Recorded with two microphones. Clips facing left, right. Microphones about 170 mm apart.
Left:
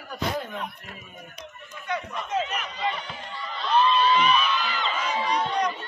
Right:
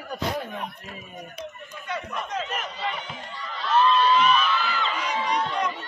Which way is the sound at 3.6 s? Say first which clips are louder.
Right 1 dB; centre (ahead or behind).